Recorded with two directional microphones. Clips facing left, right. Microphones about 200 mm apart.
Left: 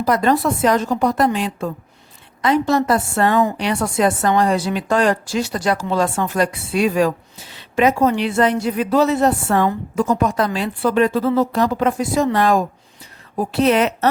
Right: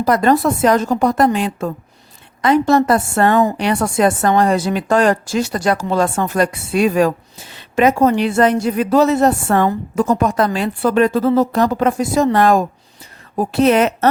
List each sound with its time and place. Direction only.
0.0 s speech: 45° right (ahead or behind)